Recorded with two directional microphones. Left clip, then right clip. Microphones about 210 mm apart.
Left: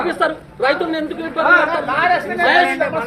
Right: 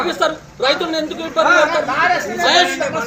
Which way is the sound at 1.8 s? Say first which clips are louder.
Even; 35° right (ahead or behind).